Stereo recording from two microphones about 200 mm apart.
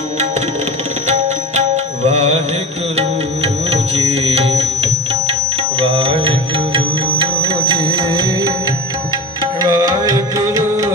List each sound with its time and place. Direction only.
1.0 s music: 35° right (ahead or behind)
3.7 s music: 30° right (ahead or behind)
9.6 s music: 20° right (ahead or behind)